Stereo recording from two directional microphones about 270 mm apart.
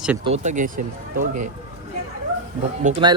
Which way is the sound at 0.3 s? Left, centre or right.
Right.